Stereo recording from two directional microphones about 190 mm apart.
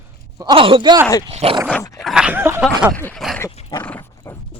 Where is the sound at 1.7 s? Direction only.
15° left (ahead or behind).